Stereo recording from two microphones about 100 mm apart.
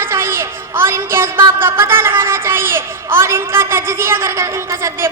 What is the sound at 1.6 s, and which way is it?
A woman's voice, 25° right (ahead or behind).